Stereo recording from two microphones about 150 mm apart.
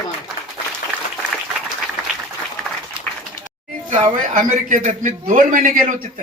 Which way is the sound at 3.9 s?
60° right (ahead or behind).